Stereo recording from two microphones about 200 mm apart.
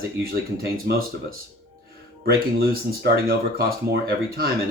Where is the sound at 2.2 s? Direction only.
50° right (ahead or behind).